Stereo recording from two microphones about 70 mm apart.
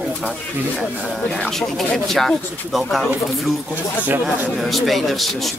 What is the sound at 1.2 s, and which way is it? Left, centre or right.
A man's voice, centre.